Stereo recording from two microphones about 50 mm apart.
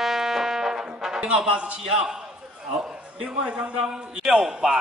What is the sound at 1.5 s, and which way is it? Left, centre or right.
A man's voice, right.